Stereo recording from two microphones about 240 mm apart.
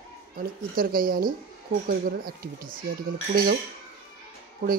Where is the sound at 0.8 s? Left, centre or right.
Right.